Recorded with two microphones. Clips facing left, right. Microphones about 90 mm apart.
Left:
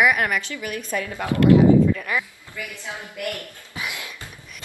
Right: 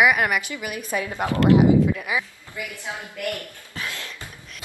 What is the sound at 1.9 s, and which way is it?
Speech, 5° right (ahead or behind).